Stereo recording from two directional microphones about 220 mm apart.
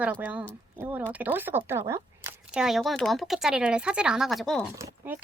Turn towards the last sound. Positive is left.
turn(degrees=-10)  # may be behind; listen again after turning